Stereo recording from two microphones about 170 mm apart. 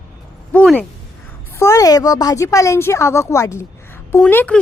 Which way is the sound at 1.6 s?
20° left (ahead or behind).